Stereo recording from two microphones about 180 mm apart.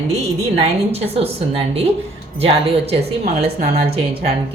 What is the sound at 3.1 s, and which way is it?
Speech, 60° right (ahead or behind).